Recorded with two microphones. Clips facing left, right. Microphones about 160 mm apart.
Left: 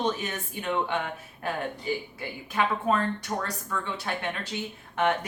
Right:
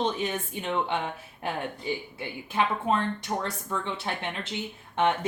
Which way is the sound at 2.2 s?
25° right (ahead or behind).